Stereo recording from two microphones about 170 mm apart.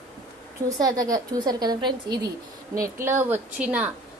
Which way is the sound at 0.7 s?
20° right (ahead or behind).